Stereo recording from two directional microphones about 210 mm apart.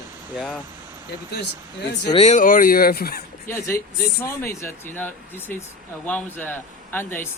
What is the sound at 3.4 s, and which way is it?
Speech, 10° left (ahead or behind).